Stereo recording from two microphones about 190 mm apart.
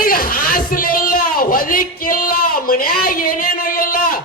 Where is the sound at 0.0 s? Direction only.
50° left (ahead or behind).